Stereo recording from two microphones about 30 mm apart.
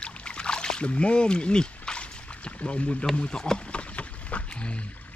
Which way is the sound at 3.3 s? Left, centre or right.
Left.